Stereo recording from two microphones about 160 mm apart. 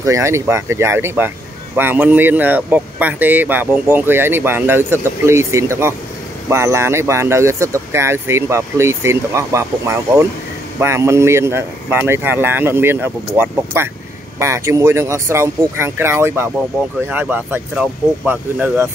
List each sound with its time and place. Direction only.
0.0 s speech: 20° right (ahead or behind)